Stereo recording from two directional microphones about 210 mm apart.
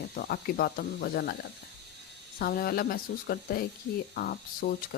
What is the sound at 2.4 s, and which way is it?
Speech, 45° left (ahead or behind).